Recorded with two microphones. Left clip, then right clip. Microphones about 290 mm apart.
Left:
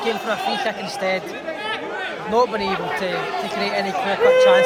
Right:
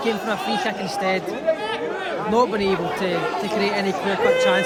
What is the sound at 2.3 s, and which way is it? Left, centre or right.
Speech, centre.